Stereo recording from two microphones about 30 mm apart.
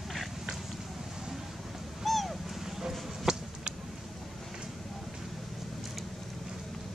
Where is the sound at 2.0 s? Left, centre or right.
Centre.